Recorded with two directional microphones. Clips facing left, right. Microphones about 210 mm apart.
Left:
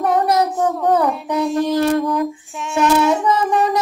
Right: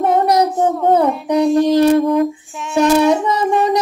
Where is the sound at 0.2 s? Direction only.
20° right (ahead or behind).